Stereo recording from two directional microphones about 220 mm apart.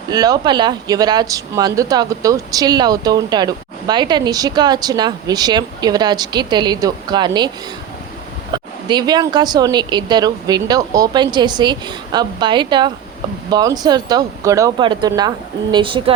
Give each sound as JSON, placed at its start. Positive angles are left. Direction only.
{"t": 0.1, "sound": "speech", "side_deg": -20}
{"t": 8.5, "sound": "speech", "side_deg": -20}